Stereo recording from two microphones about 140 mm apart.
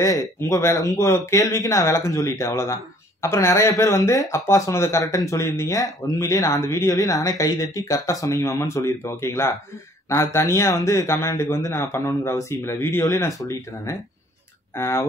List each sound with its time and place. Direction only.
0.0 s speech: 25° left (ahead or behind)